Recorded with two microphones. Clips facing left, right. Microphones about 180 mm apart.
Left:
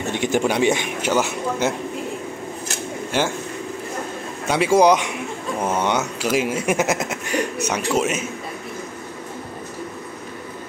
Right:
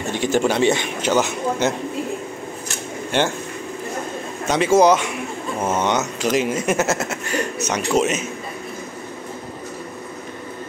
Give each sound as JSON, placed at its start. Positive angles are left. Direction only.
{"t": 0.1, "sound": "a sound", "side_deg": 20}
{"t": 0.4, "sound": "speech", "side_deg": 10}
{"t": 3.1, "sound": "speech", "side_deg": 5}
{"t": 4.5, "sound": "speech", "side_deg": 10}